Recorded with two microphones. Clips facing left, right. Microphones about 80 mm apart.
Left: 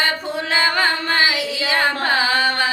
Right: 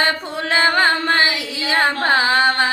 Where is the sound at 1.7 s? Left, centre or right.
Right.